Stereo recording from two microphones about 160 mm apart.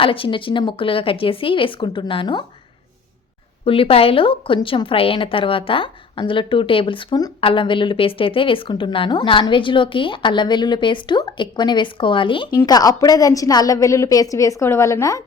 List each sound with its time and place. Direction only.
0.0 s a woman's voice: 35° left (ahead or behind)
3.6 s a woman's voice: 35° left (ahead or behind); by 15.2 s 20° left (ahead or behind)